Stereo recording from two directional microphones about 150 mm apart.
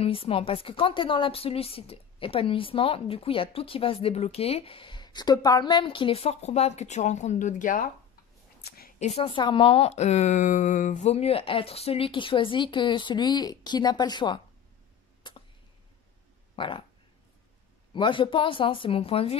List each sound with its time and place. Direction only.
0.0 s a woman's voice: 40° left (ahead or behind); by 7.9 s 65° left (ahead or behind)
8.5 s a sound: 90° left
9.0 s a woman's voice: 40° left (ahead or behind)
15.2 s a sound: 30° left (ahead or behind)
16.5 s speech: 35° left (ahead or behind)
17.9 s a woman's voice: 35° left (ahead or behind)